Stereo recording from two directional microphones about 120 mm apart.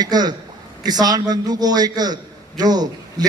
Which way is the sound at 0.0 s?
35° right (ahead or behind).